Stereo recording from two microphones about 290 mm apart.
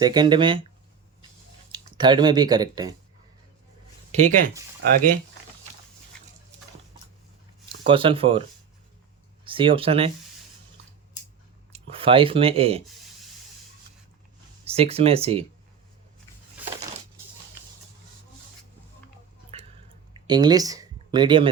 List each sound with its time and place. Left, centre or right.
0.0 s speech: centre
2.0 s speech: centre
4.1 s speech: right
7.9 s speech: centre
11.7 s speech: centre
14.6 s speech: right
20.2 s speech: centre